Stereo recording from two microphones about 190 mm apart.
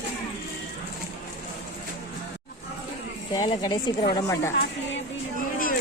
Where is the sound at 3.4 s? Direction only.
20° left (ahead or behind).